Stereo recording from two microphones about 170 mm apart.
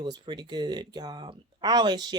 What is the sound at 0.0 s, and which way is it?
Speech, 25° right (ahead or behind).